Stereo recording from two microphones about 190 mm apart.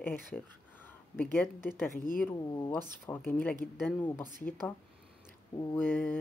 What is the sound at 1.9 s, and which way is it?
Speech, 45° left (ahead or behind).